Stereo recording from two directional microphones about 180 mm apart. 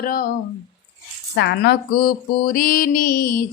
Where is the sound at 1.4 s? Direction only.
65° left (ahead or behind).